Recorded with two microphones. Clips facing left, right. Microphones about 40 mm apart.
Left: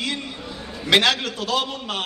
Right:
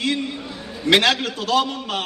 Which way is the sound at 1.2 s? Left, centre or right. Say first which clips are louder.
Right 4 dB; right.